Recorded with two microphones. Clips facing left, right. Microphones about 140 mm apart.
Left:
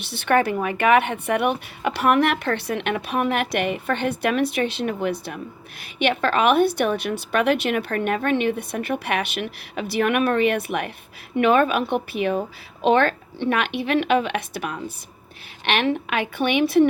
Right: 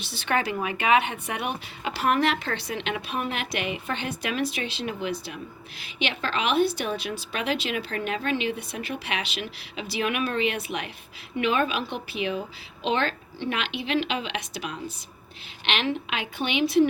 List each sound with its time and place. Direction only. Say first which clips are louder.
0.0 s speech: left 7 dB; 60° left (ahead or behind)